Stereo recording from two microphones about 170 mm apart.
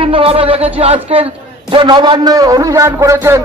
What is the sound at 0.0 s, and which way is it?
A man's voice, 35° right (ahead or behind).